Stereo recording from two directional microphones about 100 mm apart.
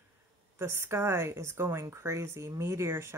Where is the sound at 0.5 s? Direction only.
25° right (ahead or behind).